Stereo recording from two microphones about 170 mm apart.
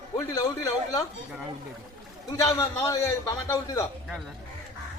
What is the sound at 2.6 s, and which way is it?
A man's voice, 20° left (ahead or behind).